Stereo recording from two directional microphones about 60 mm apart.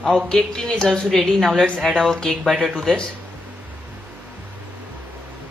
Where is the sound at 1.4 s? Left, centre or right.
Centre.